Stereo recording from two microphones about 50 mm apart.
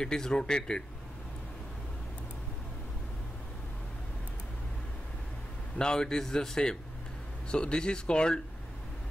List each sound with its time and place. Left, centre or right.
0.0 s a man's voice: centre
5.8 s a man's voice: centre